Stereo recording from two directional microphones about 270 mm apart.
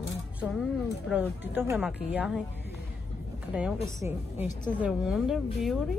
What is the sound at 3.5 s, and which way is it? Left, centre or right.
A woman's voice, centre.